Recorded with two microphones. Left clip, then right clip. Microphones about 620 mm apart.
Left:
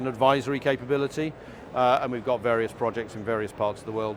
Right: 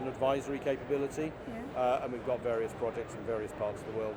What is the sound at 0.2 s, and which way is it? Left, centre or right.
Speech, left.